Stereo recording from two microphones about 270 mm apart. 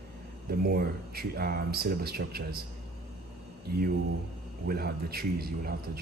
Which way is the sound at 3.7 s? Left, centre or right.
Right.